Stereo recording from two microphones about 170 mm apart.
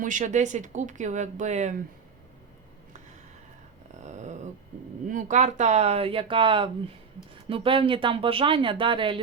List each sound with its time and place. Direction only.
0.0 s speech: 50° right (ahead or behind)
4.0 s a sound: 45° right (ahead or behind)
5.0 s speech: 45° right (ahead or behind); by 9.2 s 30° right (ahead or behind)